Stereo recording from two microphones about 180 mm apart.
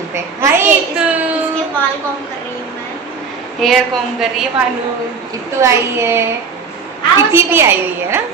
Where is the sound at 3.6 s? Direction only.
Centre (ahead or behind).